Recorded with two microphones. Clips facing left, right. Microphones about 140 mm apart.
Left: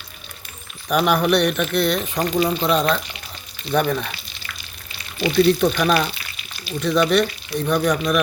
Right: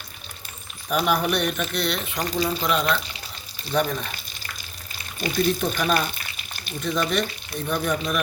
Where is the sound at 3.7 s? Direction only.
60° left (ahead or behind).